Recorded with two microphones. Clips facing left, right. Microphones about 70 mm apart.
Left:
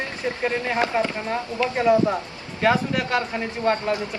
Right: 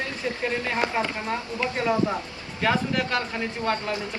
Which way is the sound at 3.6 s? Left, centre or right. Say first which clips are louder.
Left 6 dB; left.